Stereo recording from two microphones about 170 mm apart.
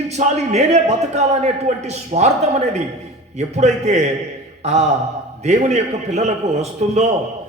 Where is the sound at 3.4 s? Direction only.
40° right (ahead or behind).